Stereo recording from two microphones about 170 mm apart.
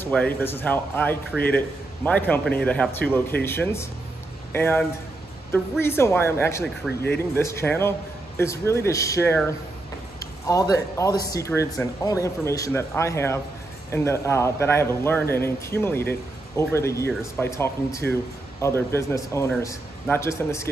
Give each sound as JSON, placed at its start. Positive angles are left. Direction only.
{"t": 0.0, "sound": "speech", "side_deg": 10}
{"t": 10.4, "sound": "speech", "side_deg": 20}